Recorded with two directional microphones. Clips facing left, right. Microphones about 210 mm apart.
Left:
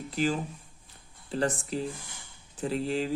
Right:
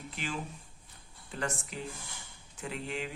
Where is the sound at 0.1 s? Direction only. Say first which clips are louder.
Left 11 dB; 40° left (ahead or behind).